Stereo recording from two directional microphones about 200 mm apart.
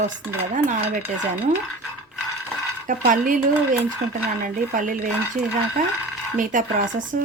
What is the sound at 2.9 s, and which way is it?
Speech, 40° right (ahead or behind).